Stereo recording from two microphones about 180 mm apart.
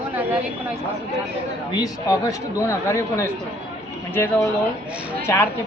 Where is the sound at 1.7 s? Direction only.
20° left (ahead or behind).